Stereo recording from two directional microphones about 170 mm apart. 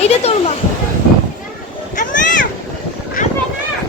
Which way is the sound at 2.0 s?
50° left (ahead or behind).